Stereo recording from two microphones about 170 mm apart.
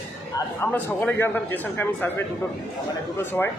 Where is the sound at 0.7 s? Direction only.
15° left (ahead or behind).